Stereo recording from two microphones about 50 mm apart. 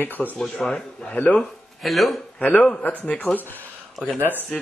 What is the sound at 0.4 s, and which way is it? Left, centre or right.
Speech, centre.